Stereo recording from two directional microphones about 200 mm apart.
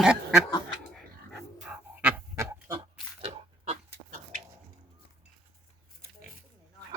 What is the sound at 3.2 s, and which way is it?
Pig, 30° right (ahead or behind).